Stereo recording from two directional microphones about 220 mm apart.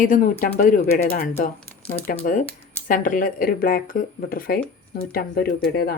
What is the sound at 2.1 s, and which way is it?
Speech, 35° left (ahead or behind).